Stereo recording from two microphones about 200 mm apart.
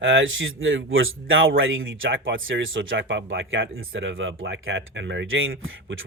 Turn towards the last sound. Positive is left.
turn(degrees=-75)  # may be behind; listen again after turning